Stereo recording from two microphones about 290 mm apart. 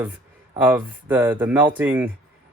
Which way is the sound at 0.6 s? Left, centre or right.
Centre.